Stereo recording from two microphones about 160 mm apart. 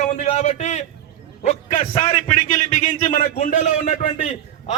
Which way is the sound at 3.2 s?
55° left (ahead or behind).